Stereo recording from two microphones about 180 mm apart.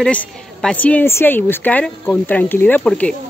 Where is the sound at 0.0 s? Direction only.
5° left (ahead or behind).